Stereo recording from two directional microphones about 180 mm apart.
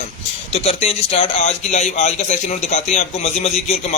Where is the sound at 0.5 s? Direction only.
35° left (ahead or behind).